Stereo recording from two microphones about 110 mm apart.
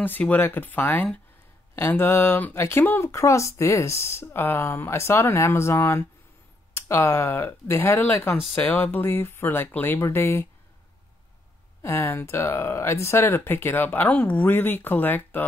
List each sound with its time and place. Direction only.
0.0 s speech: 15° left (ahead or behind)
11.8 s speech: 20° left (ahead or behind)